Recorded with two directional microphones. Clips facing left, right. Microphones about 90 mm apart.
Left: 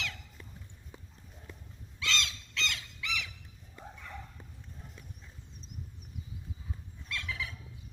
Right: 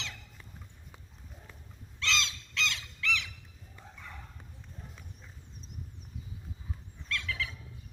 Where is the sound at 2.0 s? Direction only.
10° left (ahead or behind).